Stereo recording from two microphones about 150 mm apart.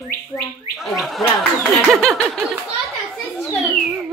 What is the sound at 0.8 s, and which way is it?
Speech, centre (ahead or behind).